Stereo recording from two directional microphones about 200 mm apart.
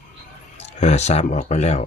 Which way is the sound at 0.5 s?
35° left (ahead or behind).